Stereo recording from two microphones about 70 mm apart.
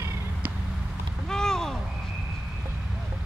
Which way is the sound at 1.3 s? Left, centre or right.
Centre.